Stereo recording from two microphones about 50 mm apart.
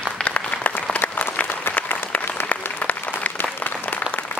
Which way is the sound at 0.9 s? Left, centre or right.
Left.